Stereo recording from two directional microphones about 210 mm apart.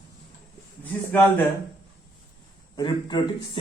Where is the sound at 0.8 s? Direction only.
10° left (ahead or behind).